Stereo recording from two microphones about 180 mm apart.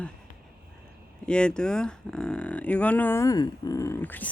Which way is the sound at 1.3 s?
5° left (ahead or behind).